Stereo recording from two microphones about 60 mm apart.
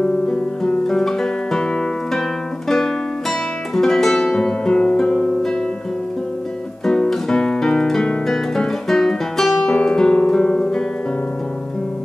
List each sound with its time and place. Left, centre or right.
0.0 s guitar: centre
2.7 s music: centre
6.9 s guitar: centre